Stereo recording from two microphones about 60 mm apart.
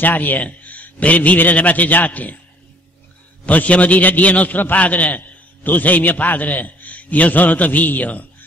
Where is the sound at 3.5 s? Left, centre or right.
Left.